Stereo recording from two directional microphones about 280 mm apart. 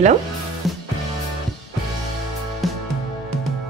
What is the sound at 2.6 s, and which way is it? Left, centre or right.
Music, centre.